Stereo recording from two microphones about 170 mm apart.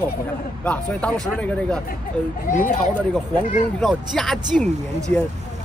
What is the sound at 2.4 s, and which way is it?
Speech, 50° left (ahead or behind).